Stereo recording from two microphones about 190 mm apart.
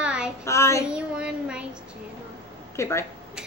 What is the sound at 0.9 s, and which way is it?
Speech, 5° right (ahead or behind).